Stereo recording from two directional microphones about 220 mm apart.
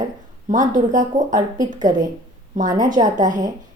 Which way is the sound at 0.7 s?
35° right (ahead or behind).